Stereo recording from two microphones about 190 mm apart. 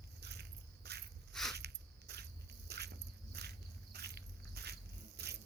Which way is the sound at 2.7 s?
60° right (ahead or behind).